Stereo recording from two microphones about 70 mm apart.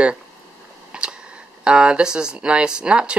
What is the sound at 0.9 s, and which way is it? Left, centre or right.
Camera, centre.